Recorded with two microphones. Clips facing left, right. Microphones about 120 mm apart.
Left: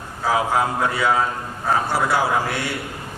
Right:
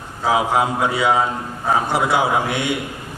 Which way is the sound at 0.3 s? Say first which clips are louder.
Right 2 dB; 15° right (ahead or behind).